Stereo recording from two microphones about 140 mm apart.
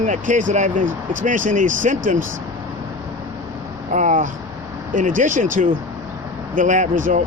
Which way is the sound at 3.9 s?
60° right (ahead or behind).